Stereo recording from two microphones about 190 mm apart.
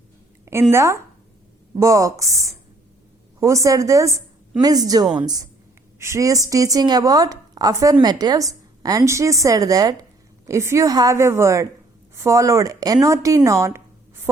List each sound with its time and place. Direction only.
0.7 s a woman's voice: 15° right (ahead or behind)